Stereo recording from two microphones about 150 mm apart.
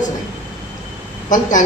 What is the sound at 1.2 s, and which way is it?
Speech, 55° left (ahead or behind).